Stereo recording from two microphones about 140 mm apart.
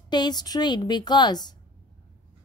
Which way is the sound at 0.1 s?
30° left (ahead or behind).